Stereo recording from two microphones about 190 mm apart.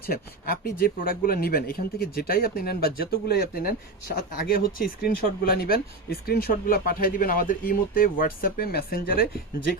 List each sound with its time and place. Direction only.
0.1 s speech: 50° left (ahead or behind)